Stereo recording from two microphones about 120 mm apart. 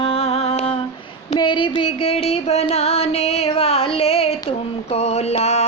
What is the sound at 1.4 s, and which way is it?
Music, 40° left (ahead or behind).